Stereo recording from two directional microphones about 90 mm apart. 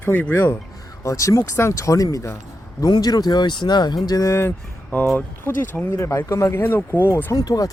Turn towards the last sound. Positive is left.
turn(degrees=45)  # may be behind; listen again after turning